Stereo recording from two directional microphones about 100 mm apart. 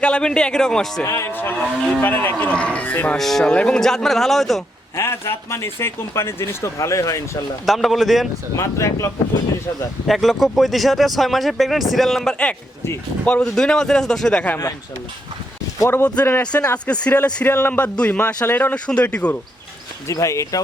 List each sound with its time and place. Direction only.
0.0 s speech: 10° left (ahead or behind)
1.0 s speech: 25° left (ahead or behind)
3.2 s speech: 5° left (ahead or behind)
4.9 s speech: 25° left (ahead or behind)
7.6 s speech: centre (ahead or behind)
8.5 s speech: 30° left (ahead or behind)
10.1 s speech: centre (ahead or behind)
15.9 s speech: 25° left (ahead or behind)
16.4 s speech: 15° left (ahead or behind)
20.1 s speech: 30° left (ahead or behind)